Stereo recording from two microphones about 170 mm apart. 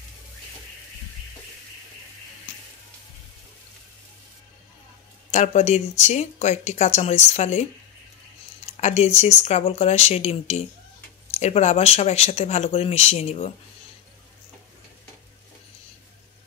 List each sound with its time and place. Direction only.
5.3 s speech: 45° left (ahead or behind)
8.8 s speech: 40° left (ahead or behind)